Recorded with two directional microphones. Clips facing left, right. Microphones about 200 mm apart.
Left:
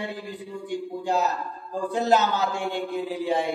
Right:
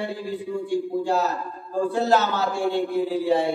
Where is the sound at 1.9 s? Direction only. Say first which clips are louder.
Left 1 dB; 20° left (ahead or behind).